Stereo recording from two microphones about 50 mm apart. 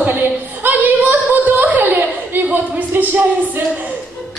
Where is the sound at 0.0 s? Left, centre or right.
Right.